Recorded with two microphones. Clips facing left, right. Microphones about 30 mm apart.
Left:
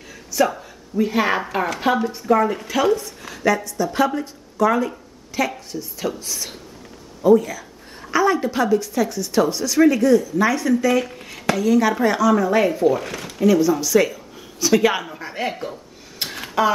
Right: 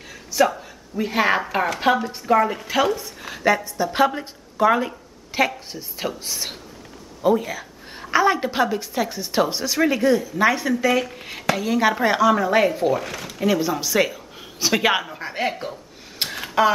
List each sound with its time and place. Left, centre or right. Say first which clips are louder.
0.5 s speech: even; centre
5.7 s chopping: left 2 dB; right
7.2 s a woman's voice: left 5 dB; right
8.7 s chopping: left 5 dB; right
10.7 s speech: left 2 dB; centre
11.5 s chopping: left 3 dB; right
12.7 s speech: left 3 dB; centre
13.4 s speech: left 5 dB; centre
15.7 s a sound: left 1 dB; centre